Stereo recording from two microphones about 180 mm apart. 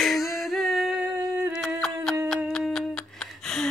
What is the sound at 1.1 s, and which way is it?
Humming, 15° right (ahead or behind).